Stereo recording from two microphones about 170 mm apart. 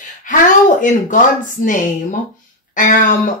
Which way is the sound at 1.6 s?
50° left (ahead or behind).